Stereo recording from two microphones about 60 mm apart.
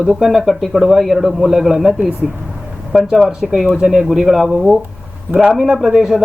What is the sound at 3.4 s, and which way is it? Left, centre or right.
A man's voice, centre.